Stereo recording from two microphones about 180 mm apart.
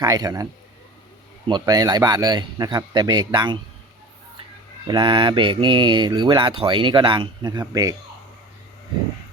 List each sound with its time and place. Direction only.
0.0 s speech: 20° right (ahead or behind)
1.5 s speech: 20° right (ahead or behind)
4.9 s speech: 25° right (ahead or behind)